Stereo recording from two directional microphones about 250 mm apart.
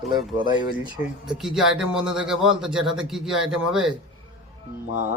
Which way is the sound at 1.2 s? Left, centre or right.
Centre.